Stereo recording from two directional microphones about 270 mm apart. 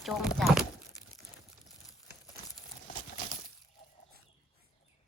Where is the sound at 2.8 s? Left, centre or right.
Left.